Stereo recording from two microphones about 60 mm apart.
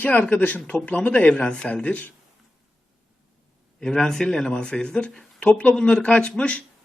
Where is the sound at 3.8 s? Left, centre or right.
Centre.